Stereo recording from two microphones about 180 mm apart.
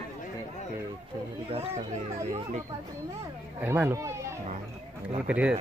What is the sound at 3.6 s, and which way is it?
Speech, 10° right (ahead or behind).